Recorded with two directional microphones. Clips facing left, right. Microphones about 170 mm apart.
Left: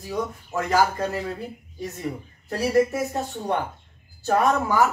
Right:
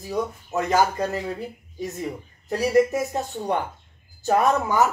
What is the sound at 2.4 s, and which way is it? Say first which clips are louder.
Speech: right 1 dB; 15° right (ahead or behind).